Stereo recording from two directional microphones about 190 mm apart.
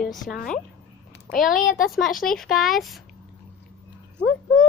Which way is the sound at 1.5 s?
45° left (ahead or behind).